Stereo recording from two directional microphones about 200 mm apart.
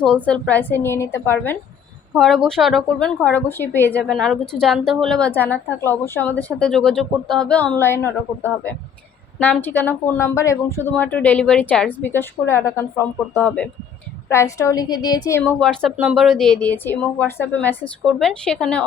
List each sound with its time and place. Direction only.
0.3 s speech: 5° left (ahead or behind)
2.1 s a woman's voice: centre (ahead or behind)